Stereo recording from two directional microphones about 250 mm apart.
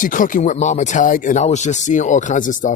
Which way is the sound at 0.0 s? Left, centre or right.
Left.